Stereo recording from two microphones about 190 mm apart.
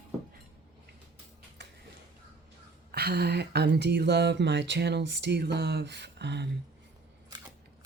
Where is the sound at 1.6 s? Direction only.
60° right (ahead or behind).